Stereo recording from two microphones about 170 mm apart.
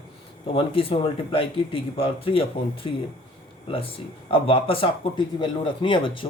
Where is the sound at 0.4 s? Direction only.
35° left (ahead or behind).